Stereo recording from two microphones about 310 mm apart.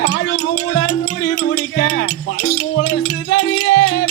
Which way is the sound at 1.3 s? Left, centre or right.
Left.